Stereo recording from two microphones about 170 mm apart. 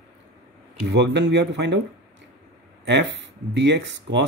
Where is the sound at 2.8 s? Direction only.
90° right.